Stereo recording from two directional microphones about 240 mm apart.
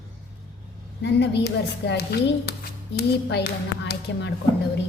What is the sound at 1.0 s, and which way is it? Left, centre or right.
A child's voice, left.